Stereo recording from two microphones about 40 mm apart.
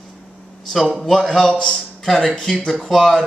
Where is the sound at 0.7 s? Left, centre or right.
Centre.